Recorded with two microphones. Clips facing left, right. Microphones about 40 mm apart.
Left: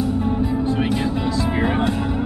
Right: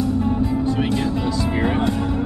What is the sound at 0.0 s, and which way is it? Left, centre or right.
Music, left.